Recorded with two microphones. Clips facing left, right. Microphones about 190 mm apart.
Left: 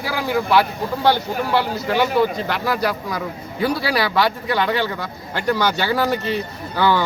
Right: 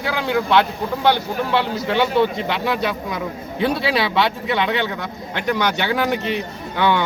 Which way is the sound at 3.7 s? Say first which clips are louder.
Right 1 dB; 25° right (ahead or behind).